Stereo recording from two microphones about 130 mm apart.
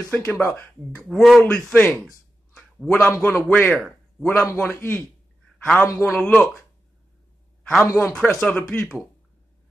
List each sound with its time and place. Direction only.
0.4 s speech: 20° left (ahead or behind)
0.9 s speech: centre (ahead or behind)
1.4 s a man's voice: 10° left (ahead or behind)
2.5 s a sound: centre (ahead or behind)
3.0 s a man's voice: 15° left (ahead or behind)
7.6 s a man's voice: 5° left (ahead or behind)